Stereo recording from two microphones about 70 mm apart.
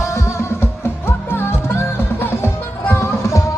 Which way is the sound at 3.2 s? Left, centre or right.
Left.